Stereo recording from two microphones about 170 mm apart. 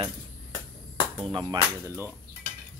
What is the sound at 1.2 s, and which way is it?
Speech, 25° right (ahead or behind).